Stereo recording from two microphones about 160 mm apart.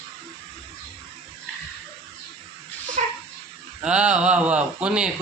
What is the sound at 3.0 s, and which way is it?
Dog, 50° right (ahead or behind).